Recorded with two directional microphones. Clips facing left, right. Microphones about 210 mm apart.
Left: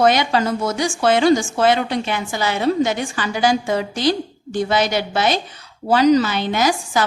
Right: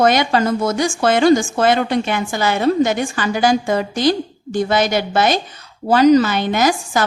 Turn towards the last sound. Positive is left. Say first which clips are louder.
# right 2 dB
turn(degrees=-50)  # may be behind; listen again after turning